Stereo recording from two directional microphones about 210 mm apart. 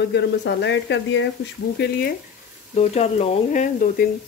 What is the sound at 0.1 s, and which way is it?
Speech, 55° left (ahead or behind).